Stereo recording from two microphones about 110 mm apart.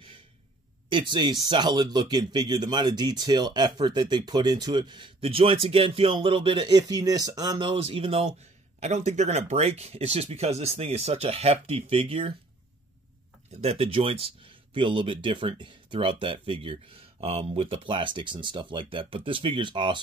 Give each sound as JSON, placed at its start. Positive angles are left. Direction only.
{"t": 0.8, "sound": "speech", "side_deg": -45}
{"t": 8.7, "sound": "speech", "side_deg": -90}
{"t": 13.6, "sound": "speech", "side_deg": -65}